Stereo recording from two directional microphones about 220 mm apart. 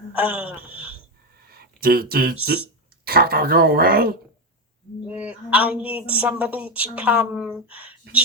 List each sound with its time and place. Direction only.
0.1 s speech: 5° right (ahead or behind)
1.5 s speech: 45° right (ahead or behind)
5.0 s speech: 5° right (ahead or behind)